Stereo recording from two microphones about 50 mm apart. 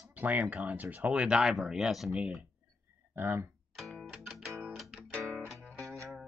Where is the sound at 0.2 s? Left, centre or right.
Right.